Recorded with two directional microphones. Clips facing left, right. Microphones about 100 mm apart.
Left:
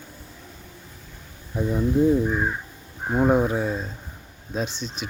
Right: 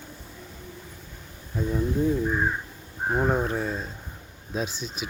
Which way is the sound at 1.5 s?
15° left (ahead or behind).